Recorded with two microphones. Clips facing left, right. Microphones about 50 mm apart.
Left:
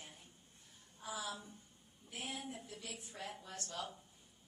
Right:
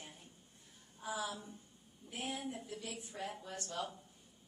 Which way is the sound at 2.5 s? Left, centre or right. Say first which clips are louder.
Right 4 dB; centre.